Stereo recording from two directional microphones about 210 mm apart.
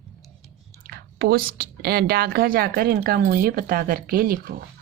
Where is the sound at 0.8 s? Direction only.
45° right (ahead or behind).